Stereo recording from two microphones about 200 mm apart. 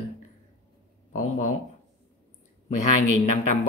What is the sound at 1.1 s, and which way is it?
Speech, 40° left (ahead or behind).